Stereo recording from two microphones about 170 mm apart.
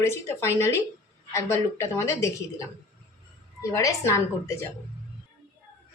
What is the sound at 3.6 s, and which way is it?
A woman's voice, 20° left (ahead or behind).